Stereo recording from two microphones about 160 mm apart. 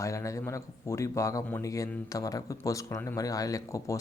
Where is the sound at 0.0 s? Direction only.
20° left (ahead or behind).